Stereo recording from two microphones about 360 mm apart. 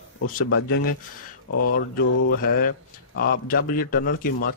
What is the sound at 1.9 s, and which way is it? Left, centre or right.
Speech, left.